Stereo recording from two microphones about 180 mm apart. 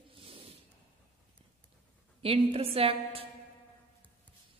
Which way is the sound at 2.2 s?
30° right (ahead or behind).